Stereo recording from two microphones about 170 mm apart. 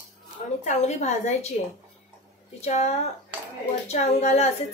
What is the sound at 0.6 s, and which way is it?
Speech, 40° left (ahead or behind).